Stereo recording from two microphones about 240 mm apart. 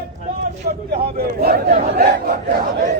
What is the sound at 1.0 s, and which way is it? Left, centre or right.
Speech, right.